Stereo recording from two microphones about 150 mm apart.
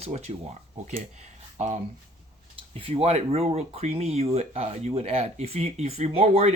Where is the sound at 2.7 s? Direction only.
40° right (ahead or behind).